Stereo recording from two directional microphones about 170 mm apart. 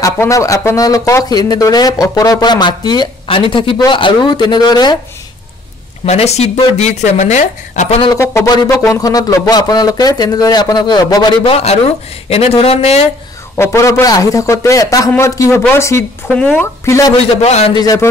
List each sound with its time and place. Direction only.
0.0 s speech: 20° left (ahead or behind)
6.0 s speech: 40° left (ahead or behind)
8.2 s speech: 15° left (ahead or behind); by 13.0 s 35° left (ahead or behind)
13.6 s a man's voice: 15° left (ahead or behind)
16.8 s speech: 15° left (ahead or behind)
17.4 s speech: 35° left (ahead or behind)
17.7 s speech: 20° left (ahead or behind)